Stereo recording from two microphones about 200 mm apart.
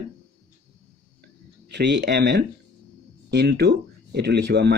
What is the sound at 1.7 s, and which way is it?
Speech, 60° right (ahead or behind).